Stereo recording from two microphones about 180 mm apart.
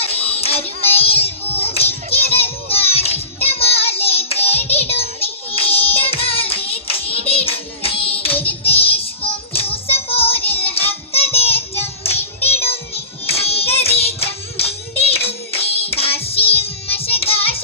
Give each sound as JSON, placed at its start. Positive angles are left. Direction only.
{"t": 0.0, "sound": "music", "side_deg": 35}
{"t": 1.7, "sound": "child singing", "side_deg": 35}
{"t": 12.0, "sound": "music", "side_deg": 35}